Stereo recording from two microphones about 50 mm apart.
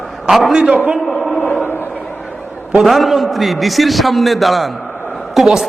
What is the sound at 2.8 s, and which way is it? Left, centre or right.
A man's voice, centre.